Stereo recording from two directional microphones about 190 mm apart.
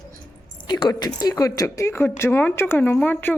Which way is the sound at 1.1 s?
20° left (ahead or behind).